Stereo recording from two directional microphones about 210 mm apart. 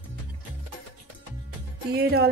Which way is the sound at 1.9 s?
50° right (ahead or behind).